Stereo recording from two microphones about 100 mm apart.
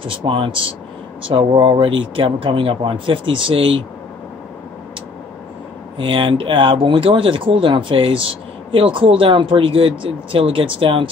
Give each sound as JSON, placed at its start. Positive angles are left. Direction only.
{"t": 0.0, "sound": "speech", "side_deg": -60}
{"t": 5.9, "sound": "speech", "side_deg": -60}